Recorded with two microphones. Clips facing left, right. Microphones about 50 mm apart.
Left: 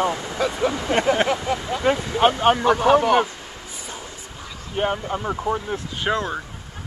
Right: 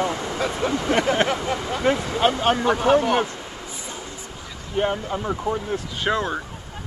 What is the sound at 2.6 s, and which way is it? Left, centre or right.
Speech, centre.